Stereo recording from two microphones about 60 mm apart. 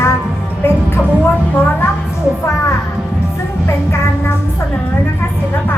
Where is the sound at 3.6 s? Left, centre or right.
Left.